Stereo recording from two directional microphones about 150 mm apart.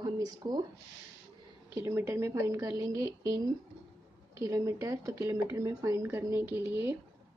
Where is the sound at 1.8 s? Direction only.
20° right (ahead or behind).